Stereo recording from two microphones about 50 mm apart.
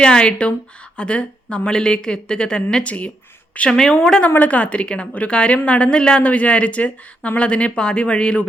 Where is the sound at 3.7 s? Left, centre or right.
Centre.